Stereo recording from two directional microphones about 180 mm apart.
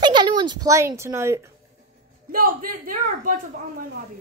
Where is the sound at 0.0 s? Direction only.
25° right (ahead or behind).